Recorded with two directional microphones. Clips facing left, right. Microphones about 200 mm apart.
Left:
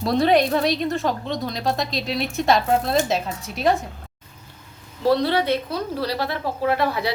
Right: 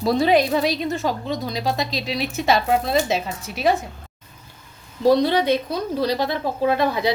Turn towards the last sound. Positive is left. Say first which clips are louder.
# right 2 dB
turn(degrees=-20)  # may be behind; listen again after turning